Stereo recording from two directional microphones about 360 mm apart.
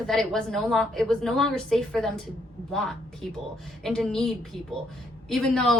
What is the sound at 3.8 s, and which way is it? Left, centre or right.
A woman's voice, centre.